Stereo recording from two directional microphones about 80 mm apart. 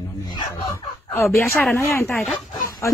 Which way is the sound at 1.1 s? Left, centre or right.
Left.